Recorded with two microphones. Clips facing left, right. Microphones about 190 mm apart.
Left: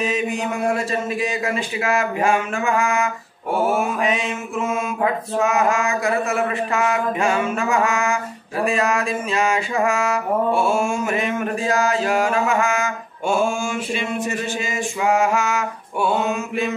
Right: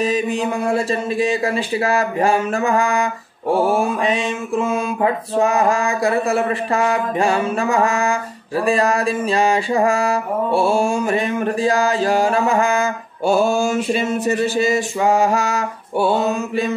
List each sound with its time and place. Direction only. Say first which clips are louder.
0.0 s speech: right 3 dB; 35° right (ahead or behind)